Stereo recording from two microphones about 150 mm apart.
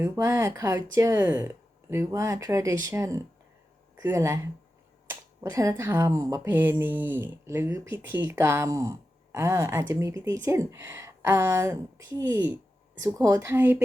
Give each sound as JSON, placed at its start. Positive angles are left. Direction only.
{"t": 0.0, "sound": "speech", "side_deg": -20}
{"t": 5.4, "sound": "speech", "side_deg": -20}